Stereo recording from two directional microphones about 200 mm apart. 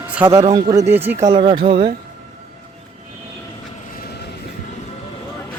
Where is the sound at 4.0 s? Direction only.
55° left (ahead or behind).